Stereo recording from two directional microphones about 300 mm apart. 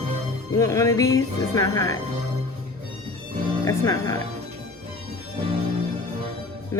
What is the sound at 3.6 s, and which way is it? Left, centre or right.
Speech, centre.